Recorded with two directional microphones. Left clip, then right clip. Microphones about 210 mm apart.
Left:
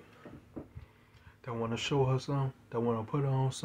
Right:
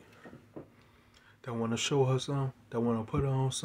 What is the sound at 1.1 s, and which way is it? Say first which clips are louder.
Speech: even; 15° right (ahead or behind).